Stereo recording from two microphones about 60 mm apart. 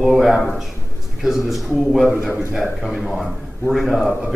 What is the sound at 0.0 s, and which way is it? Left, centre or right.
A man's voice, centre.